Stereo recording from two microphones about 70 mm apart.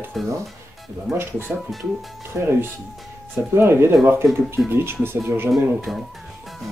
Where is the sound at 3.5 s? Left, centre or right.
Right.